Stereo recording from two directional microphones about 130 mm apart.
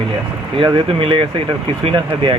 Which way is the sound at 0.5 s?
45° right (ahead or behind).